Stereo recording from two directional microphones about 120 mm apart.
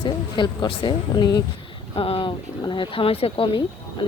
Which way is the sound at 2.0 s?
45° left (ahead or behind).